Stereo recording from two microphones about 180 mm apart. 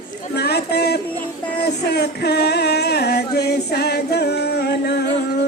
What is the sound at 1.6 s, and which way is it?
Music, 65° left (ahead or behind).